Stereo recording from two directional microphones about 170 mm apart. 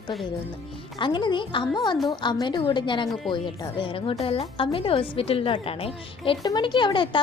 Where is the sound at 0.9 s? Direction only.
30° left (ahead or behind).